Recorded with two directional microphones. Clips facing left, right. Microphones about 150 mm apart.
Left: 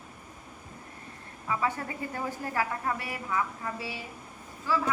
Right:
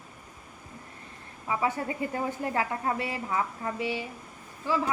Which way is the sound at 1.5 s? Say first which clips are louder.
Right 2 dB; 20° right (ahead or behind).